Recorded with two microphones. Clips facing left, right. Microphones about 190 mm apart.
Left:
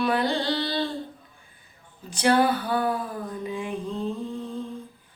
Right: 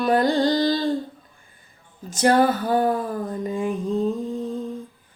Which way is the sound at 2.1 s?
45° right (ahead or behind).